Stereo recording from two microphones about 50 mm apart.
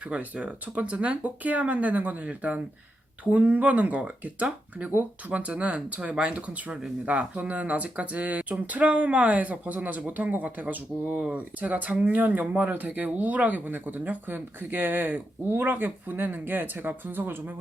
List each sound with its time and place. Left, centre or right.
0.1 s speech: right